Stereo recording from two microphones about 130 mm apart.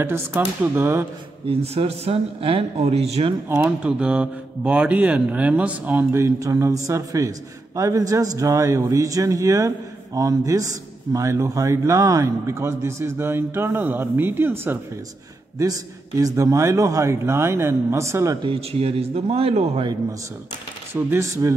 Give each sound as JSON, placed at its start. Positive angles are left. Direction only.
{"t": 0.0, "sound": "speech", "side_deg": -20}
{"t": 1.5, "sound": "speech", "side_deg": -50}
{"t": 3.4, "sound": "speech", "side_deg": -15}
{"t": 15.6, "sound": "speech", "side_deg": -25}
{"t": 18.4, "sound": "speech", "side_deg": -50}
{"t": 20.9, "sound": "speech", "side_deg": -20}